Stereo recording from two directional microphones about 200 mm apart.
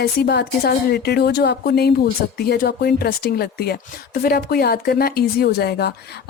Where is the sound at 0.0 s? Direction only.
55° left (ahead or behind).